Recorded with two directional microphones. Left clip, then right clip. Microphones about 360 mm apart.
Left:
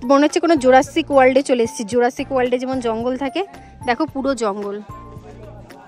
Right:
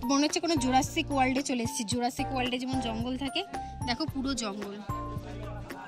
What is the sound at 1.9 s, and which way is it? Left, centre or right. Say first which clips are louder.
Speech: left 13 dB; centre.